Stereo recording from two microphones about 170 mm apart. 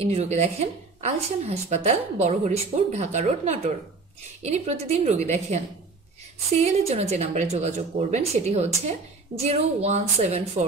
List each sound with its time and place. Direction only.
0.0 s a woman's voice: 40° right (ahead or behind)